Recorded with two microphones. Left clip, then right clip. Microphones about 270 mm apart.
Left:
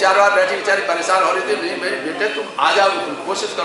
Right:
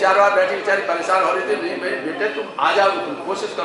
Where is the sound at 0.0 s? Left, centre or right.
Centre.